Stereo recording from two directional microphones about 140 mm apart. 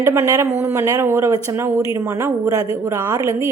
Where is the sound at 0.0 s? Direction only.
20° right (ahead or behind).